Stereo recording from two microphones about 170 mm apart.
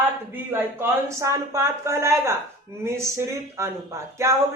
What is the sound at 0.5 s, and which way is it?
A man's voice, 15° right (ahead or behind).